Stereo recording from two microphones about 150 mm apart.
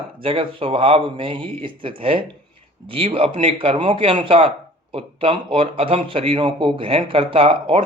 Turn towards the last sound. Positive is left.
turn(degrees=-35)  # may be behind; listen again after turning